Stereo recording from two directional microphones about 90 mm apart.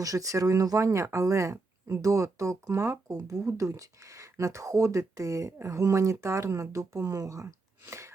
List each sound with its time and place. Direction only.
0.0 s speech: 40° right (ahead or behind)
3.1 s speech: 40° right (ahead or behind)